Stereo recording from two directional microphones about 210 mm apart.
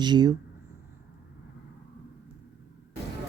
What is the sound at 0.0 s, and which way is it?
Speech, 20° right (ahead or behind).